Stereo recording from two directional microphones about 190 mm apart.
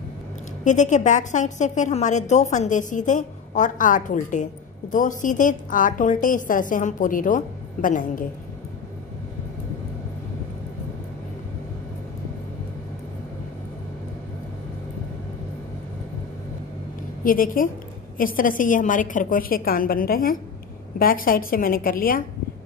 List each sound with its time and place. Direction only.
0.7 s a woman's voice: 40° left (ahead or behind)
17.2 s a woman's voice: 45° left (ahead or behind)